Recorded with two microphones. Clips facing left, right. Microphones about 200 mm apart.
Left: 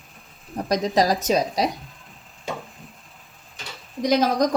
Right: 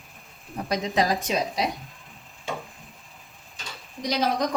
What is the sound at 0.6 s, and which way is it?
Speech, 40° left (ahead or behind).